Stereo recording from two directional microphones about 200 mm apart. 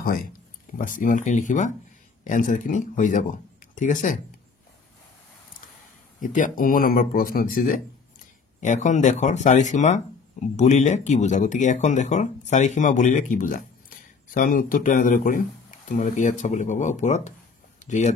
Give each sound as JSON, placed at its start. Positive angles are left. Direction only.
{"t": 0.7, "sound": "speech", "side_deg": 40}
{"t": 6.2, "sound": "speech", "side_deg": 40}
{"t": 17.7, "sound": "a sound", "side_deg": 35}